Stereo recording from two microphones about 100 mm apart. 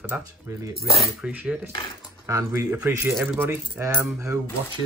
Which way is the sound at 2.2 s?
30° right (ahead or behind).